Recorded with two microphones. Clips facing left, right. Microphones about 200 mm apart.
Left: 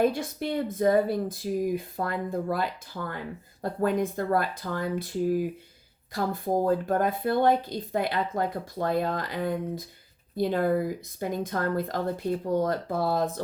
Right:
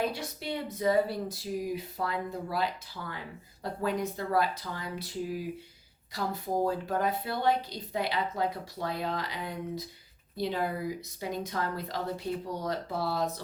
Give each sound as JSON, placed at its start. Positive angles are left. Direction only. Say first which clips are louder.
{"t": 0.0, "sound": "a woman's voice", "louder": "left 8 dB", "side_deg": 50}